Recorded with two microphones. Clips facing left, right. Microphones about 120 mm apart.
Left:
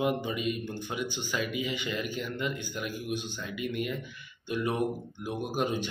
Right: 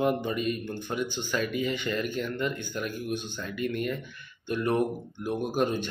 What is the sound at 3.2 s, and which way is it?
Speech, 50° right (ahead or behind).